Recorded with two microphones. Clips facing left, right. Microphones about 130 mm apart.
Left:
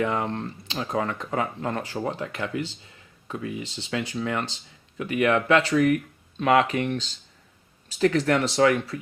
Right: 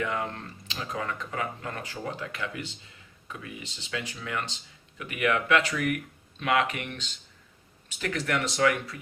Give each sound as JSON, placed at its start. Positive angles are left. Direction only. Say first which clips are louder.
{"t": 0.0, "sound": "speech", "louder": "left 5 dB", "side_deg": 30}